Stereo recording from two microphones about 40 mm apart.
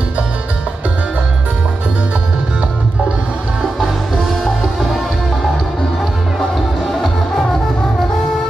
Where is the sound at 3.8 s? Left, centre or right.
Centre.